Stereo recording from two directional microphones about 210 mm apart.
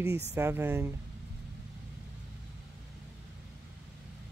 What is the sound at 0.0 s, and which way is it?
Speech, 10° right (ahead or behind).